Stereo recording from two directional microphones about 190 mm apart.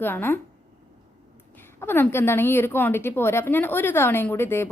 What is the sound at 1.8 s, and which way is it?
Speech, 10° left (ahead or behind).